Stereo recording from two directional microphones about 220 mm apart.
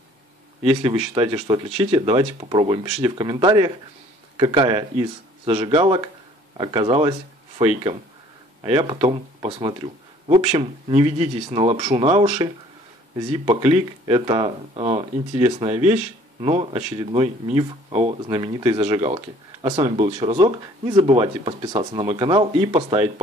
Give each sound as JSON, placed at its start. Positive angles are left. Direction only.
{"t": 0.6, "sound": "speech", "side_deg": -25}